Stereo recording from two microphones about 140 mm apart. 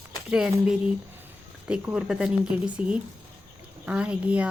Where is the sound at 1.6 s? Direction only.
5° right (ahead or behind).